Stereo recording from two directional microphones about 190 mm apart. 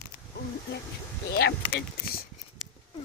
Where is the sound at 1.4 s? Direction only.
60° left (ahead or behind).